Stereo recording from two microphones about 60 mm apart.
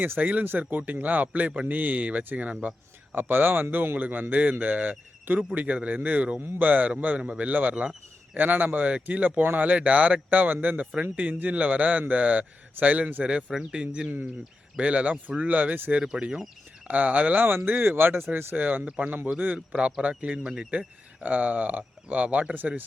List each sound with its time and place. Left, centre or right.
0.0 s speech: right
3.2 s speech: right
7.2 s speech: right
13.3 s speech: centre; by 16.0 s right
16.0 s speech: centre
16.9 s speech: right
21.2 s speech: right